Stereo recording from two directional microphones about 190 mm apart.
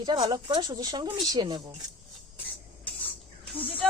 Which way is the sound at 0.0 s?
25° right (ahead or behind).